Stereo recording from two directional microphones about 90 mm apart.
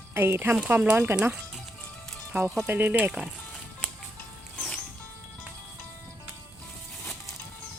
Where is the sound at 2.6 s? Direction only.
20° right (ahead or behind).